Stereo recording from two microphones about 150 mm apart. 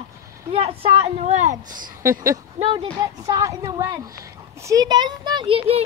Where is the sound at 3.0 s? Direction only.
25° right (ahead or behind).